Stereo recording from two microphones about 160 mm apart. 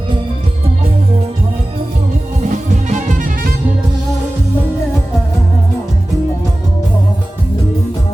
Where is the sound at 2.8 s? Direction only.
50° right (ahead or behind).